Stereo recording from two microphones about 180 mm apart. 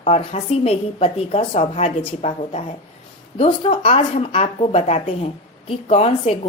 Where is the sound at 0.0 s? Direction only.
35° left (ahead or behind).